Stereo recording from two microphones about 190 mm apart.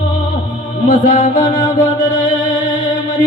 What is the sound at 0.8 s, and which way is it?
Music, 45° left (ahead or behind).